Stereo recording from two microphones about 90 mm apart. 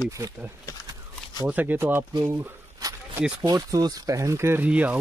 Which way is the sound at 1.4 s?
15° right (ahead or behind).